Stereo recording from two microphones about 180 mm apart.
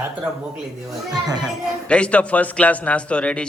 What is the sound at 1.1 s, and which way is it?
Speech, 20° right (ahead or behind).